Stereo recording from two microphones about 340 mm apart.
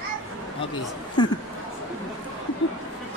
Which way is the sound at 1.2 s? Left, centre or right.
Centre.